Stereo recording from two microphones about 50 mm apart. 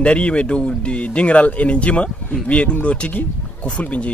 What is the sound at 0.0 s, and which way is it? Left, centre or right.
A man's voice, left.